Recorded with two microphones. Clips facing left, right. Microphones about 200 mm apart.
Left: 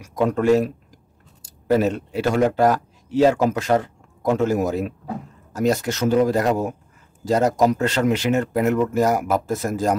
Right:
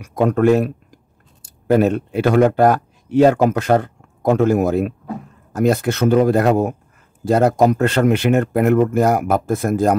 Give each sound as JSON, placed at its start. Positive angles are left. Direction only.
{"t": 0.0, "sound": "speech", "side_deg": -60}